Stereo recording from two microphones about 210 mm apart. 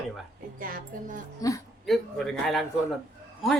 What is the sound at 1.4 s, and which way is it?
Speech, 15° left (ahead or behind).